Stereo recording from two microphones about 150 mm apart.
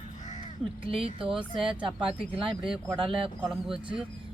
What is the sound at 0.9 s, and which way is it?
Speech, 35° right (ahead or behind).